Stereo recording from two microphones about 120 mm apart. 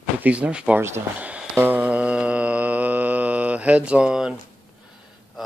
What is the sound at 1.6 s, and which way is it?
Mantra, 10° right (ahead or behind).